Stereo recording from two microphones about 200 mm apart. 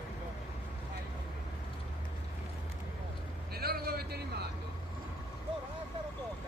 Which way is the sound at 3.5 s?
50° right (ahead or behind).